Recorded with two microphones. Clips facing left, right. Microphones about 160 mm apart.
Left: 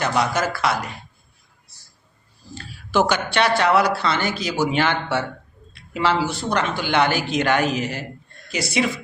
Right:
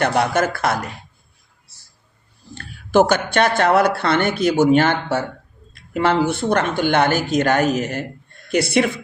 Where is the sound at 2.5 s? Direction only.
55° right (ahead or behind).